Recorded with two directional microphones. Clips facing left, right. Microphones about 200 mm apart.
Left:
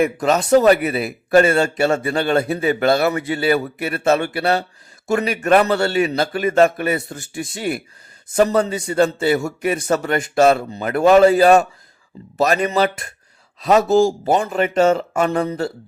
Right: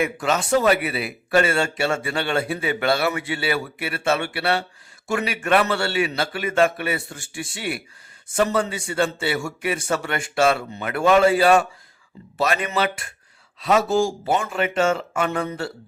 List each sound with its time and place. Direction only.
0.0 s a man's voice: 40° left (ahead or behind)